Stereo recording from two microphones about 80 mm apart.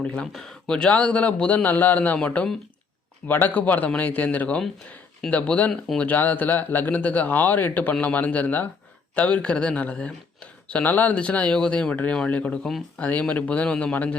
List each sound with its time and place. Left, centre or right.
0.0 s speech: centre